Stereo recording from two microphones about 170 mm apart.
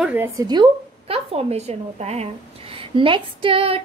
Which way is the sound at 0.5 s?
30° right (ahead or behind).